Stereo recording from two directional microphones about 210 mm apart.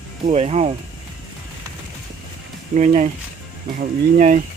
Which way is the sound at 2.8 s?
35° right (ahead or behind).